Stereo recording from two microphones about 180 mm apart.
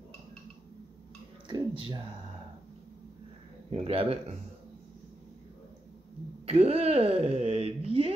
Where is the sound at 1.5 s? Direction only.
25° right (ahead or behind).